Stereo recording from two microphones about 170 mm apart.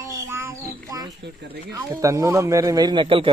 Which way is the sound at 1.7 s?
20° right (ahead or behind).